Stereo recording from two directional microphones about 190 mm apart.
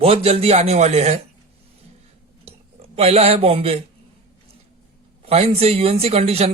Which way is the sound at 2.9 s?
30° right (ahead or behind).